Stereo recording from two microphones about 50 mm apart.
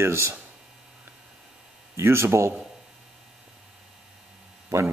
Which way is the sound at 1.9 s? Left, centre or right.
Right.